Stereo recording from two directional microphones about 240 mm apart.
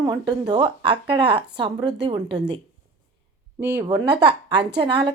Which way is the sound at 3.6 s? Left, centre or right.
Centre.